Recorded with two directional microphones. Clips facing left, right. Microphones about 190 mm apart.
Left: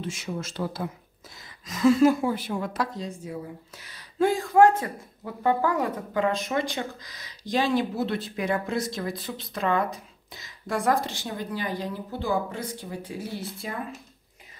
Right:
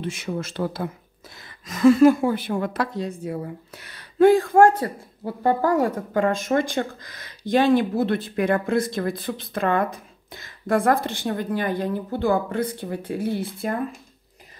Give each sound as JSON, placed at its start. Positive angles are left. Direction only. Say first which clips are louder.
{"t": 0.0, "sound": "a woman's voice", "louder": "right 4 dB", "side_deg": -60}